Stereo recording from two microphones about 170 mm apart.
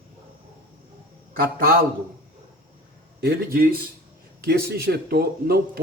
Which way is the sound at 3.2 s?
65° right (ahead or behind).